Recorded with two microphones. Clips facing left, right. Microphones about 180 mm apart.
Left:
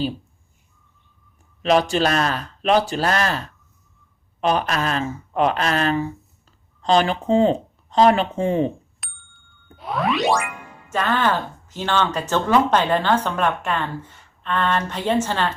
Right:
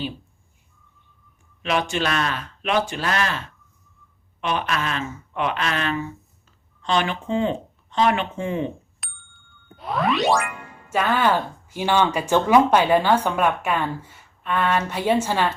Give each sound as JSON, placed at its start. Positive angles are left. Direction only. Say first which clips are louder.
{"t": 1.6, "sound": "speech", "louder": "left 5 dB", "side_deg": 35}
{"t": 9.0, "sound": "ding", "louder": "even", "side_deg": 0}